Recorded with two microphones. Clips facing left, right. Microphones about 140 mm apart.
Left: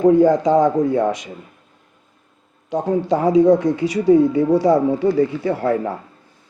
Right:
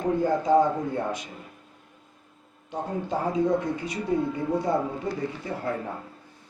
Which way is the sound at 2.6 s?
90° left.